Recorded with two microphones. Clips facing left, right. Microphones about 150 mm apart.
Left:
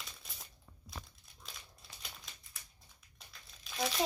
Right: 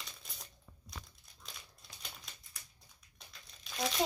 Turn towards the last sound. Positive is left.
turn(degrees=0)  # may be behind; listen again after turning